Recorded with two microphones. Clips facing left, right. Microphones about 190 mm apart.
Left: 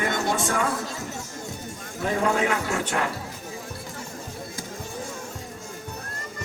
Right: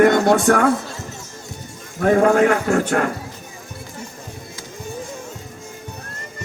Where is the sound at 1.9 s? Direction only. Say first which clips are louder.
Right 10 dB; 55° right (ahead or behind).